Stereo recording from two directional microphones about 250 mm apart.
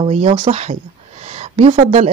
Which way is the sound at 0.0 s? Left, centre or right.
Right.